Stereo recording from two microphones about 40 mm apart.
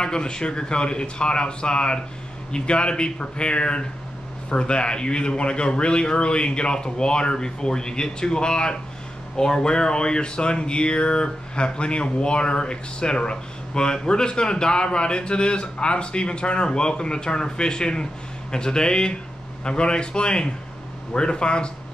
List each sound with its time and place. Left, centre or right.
0.0 s speech: left